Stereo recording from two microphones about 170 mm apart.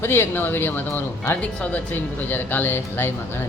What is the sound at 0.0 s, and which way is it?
Speech, 15° left (ahead or behind).